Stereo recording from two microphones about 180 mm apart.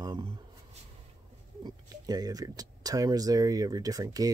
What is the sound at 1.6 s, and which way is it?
Speech, 20° right (ahead or behind).